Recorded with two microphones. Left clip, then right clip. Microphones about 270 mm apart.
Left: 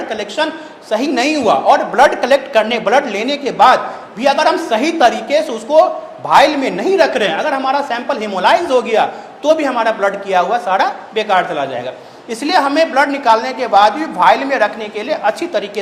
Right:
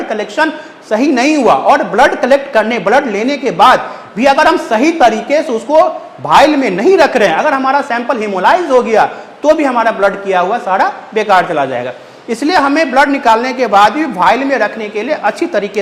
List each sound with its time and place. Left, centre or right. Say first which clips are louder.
0.1 s a woman's voice: right 5 dB; right